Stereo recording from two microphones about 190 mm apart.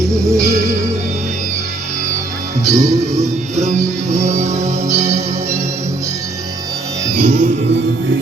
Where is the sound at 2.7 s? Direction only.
15° right (ahead or behind).